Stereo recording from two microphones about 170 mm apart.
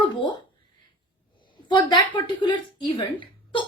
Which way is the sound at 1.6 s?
30° left (ahead or behind).